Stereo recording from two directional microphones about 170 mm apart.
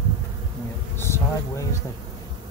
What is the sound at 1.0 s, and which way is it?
Speech, 15° left (ahead or behind).